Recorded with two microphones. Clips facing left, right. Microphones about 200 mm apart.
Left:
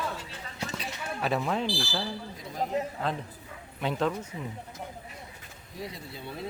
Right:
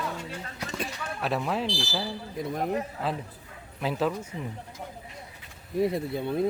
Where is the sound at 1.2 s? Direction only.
Centre (ahead or behind).